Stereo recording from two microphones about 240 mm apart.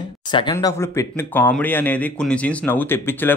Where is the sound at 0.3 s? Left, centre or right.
Centre.